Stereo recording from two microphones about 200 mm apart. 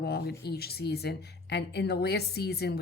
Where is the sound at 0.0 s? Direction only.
55° left (ahead or behind).